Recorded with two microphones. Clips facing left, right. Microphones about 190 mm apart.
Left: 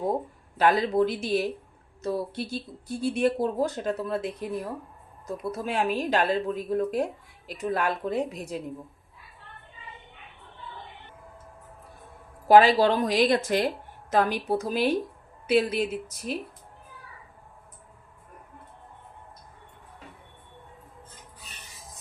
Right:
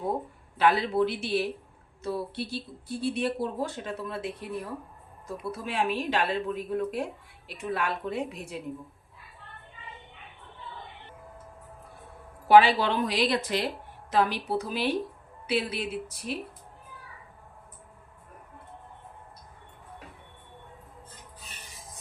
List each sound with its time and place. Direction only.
0.6 s speech: 40° left (ahead or behind)
5.4 s speech: 45° left (ahead or behind)
12.5 s speech: 40° left (ahead or behind)